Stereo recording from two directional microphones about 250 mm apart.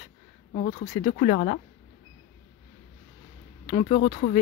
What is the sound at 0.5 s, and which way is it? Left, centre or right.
Speech, left.